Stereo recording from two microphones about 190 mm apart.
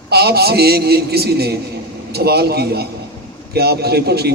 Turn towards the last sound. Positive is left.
turn(degrees=-55)  # may be behind; listen again after turning